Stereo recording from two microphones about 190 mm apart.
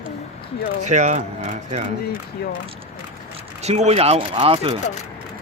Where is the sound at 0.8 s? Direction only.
40° right (ahead or behind).